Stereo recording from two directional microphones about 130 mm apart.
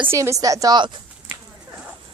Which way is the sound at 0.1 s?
25° right (ahead or behind).